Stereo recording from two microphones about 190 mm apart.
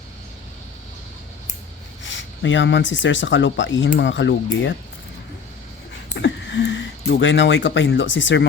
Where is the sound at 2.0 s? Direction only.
75° left (ahead or behind).